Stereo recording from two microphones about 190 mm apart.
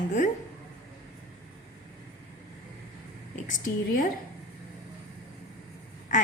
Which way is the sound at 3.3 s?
45° left (ahead or behind).